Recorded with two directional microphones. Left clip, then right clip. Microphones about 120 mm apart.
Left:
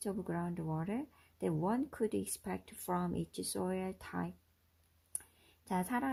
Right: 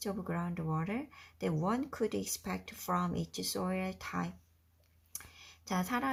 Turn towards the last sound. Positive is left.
turn(degrees=55)  # may be behind; listen again after turning